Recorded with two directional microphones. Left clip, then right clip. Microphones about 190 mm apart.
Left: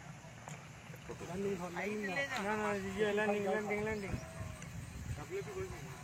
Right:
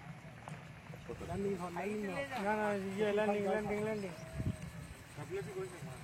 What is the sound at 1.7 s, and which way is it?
Speech, 45° right (ahead or behind).